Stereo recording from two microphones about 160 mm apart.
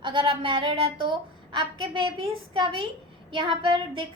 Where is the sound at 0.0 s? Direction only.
30° right (ahead or behind).